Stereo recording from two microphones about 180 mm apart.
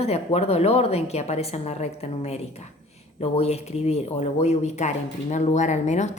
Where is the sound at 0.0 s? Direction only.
35° left (ahead or behind).